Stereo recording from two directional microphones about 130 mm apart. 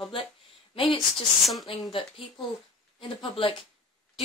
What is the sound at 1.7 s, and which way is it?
Speech, 40° left (ahead or behind).